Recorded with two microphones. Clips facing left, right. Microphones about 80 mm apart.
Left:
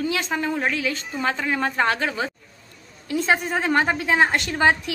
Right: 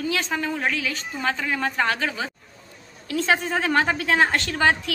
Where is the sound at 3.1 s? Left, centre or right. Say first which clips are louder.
Left 1 dB; centre.